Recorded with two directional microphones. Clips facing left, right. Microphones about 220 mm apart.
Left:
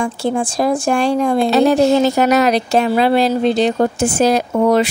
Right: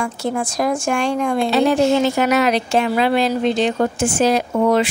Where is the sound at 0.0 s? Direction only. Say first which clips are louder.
Left 4 dB; 30° left (ahead or behind).